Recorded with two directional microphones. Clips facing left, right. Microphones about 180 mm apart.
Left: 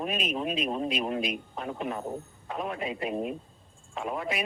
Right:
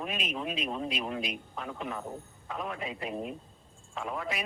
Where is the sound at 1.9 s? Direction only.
30° left (ahead or behind).